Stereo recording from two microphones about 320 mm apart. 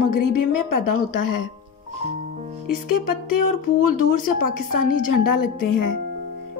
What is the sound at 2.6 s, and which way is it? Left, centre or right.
Speech, left.